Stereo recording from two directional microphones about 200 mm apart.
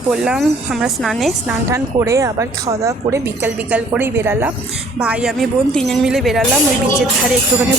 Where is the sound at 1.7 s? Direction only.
15° right (ahead or behind).